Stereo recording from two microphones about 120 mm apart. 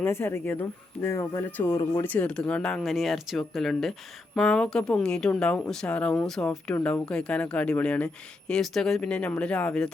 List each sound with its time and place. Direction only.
0.0 s speech: 20° left (ahead or behind)